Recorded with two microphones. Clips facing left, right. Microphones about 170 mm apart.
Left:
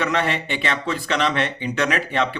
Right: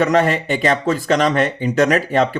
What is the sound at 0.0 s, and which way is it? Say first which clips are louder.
Speech: right 7 dB; 40° right (ahead or behind).